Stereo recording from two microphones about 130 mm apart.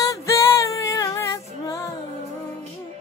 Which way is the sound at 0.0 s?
25° left (ahead or behind).